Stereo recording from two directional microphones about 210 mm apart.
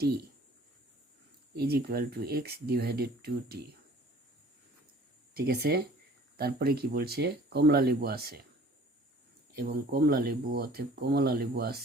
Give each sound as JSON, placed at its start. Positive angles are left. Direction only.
{"t": 1.5, "sound": "speech", "side_deg": -50}
{"t": 5.3, "sound": "speech", "side_deg": -50}
{"t": 9.6, "sound": "speech", "side_deg": -45}